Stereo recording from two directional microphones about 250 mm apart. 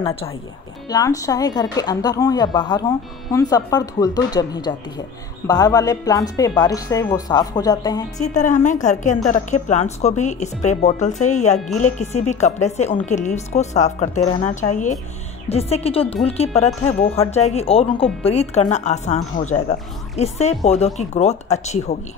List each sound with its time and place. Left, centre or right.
0.0 s a woman's voice: left
8.2 s a woman's voice: left